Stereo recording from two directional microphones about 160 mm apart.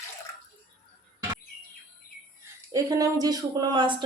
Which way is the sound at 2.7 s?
20° right (ahead or behind).